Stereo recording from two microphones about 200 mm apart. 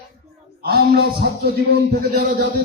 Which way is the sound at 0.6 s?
50° right (ahead or behind).